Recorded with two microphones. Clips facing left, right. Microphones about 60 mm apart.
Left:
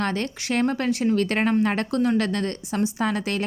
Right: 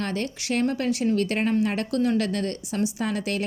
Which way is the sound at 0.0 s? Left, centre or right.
Left.